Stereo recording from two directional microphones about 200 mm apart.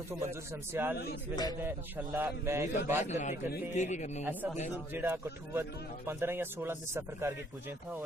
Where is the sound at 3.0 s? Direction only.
35° left (ahead or behind).